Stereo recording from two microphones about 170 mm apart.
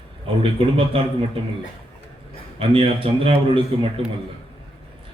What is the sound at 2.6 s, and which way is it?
Speech, 35° right (ahead or behind).